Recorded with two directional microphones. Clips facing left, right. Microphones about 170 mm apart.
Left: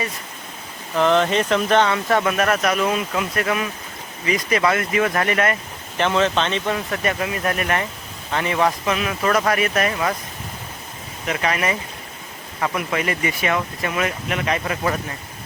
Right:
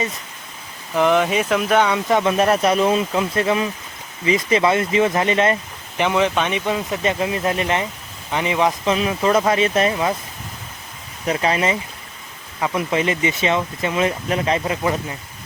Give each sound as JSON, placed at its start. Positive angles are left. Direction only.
{"t": 0.9, "sound": "speech", "side_deg": -10}
{"t": 2.3, "sound": "speech", "side_deg": -30}
{"t": 11.3, "sound": "speech", "side_deg": -25}